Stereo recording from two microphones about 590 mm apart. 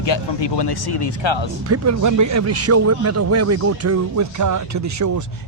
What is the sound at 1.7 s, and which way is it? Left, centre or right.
Speech, right.